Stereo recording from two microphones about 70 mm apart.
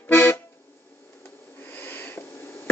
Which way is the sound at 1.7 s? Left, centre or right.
Left.